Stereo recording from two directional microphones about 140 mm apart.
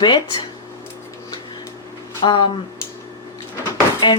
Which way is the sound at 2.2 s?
35° left (ahead or behind).